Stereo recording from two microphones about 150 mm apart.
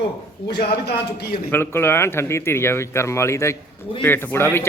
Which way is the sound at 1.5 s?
15° left (ahead or behind).